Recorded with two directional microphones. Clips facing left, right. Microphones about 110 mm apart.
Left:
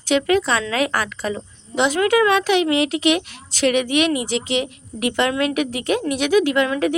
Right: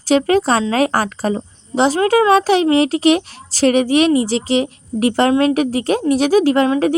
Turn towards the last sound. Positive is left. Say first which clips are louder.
# right 5 dB
turn(degrees=-35)  # may be behind; listen again after turning